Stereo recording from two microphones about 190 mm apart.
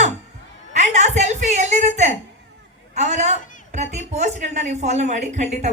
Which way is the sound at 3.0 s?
35° right (ahead or behind).